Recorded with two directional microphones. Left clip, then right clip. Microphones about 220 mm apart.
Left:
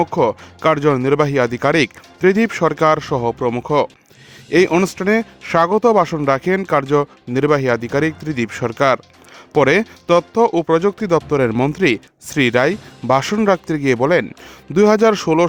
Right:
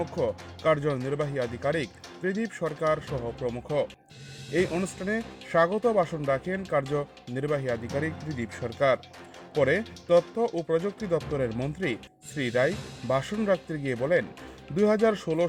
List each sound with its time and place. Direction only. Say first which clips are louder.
0.2 s speech: left 13 dB; 50° left (ahead or behind)